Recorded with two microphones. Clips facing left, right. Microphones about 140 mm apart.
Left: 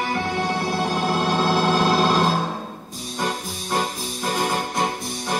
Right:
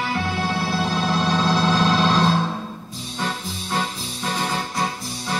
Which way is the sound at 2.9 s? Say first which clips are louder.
Left 2 dB; 45° left (ahead or behind).